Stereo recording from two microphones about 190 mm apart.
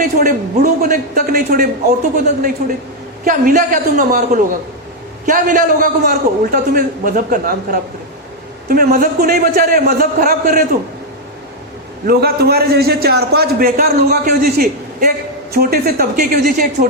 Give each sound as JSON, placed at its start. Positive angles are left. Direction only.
{"t": 0.0, "sound": "a man's voice", "side_deg": -50}
{"t": 3.2, "sound": "a man's voice", "side_deg": -45}
{"t": 12.0, "sound": "a man's voice", "side_deg": -55}